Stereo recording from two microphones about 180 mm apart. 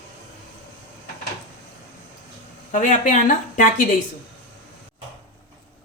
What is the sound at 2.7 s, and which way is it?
Speech, 45° left (ahead or behind).